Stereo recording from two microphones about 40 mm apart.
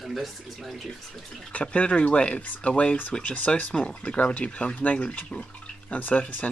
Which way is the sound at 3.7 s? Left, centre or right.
Left.